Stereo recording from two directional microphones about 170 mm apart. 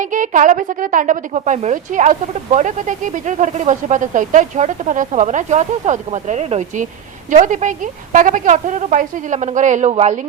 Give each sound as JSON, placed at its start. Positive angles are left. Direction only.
{"t": 0.0, "sound": "a woman's voice", "side_deg": -50}